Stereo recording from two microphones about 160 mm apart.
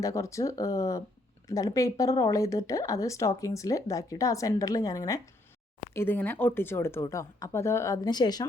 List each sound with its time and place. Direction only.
0.0 s speech: 20° left (ahead or behind)